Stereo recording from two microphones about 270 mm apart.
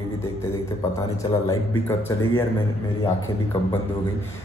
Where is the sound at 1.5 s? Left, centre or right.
Centre.